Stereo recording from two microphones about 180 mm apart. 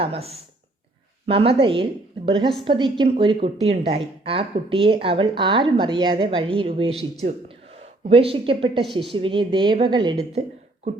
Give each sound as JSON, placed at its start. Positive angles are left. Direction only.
{"t": 0.0, "sound": "a woman's voice", "side_deg": -35}
{"t": 8.9, "sound": "a woman's voice", "side_deg": 0}
{"t": 9.1, "sound": "a woman's voice", "side_deg": -30}